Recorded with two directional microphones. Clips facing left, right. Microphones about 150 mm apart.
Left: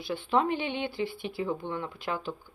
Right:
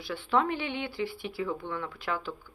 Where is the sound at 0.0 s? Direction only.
20° left (ahead or behind).